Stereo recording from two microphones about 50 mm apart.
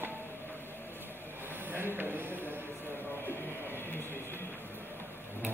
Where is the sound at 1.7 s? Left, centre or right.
Right.